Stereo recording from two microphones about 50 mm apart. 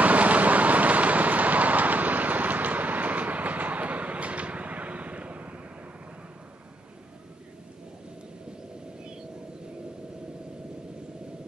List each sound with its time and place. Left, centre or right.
0.0 s vehicle: right